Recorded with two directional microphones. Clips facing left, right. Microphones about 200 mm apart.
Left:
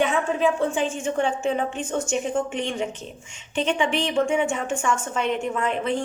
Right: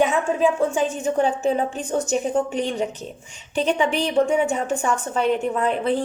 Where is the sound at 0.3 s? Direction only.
40° right (ahead or behind).